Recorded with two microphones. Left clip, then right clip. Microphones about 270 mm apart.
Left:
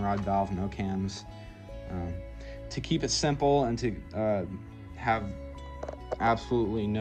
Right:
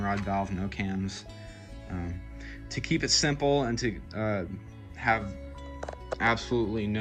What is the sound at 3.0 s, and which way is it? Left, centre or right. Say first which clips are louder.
Speech: even; centre.